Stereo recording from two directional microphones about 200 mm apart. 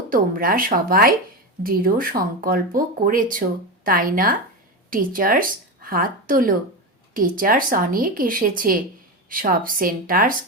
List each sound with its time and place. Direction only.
0.1 s a woman's voice: 45° right (ahead or behind)